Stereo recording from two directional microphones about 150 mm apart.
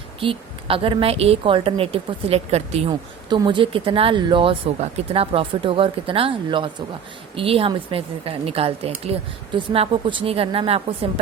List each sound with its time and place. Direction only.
0.2 s speech: 35° right (ahead or behind)
3.2 s speech: 30° right (ahead or behind)